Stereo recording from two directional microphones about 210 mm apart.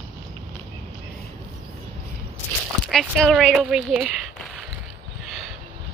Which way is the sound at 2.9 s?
Centre (ahead or behind).